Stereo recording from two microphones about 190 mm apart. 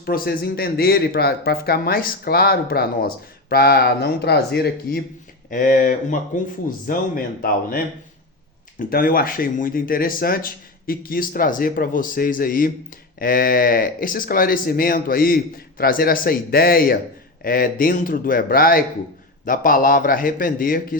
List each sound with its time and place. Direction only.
0.0 s speech: 50° left (ahead or behind)
5.5 s speech: 45° left (ahead or behind)
8.9 s speech: 50° left (ahead or behind)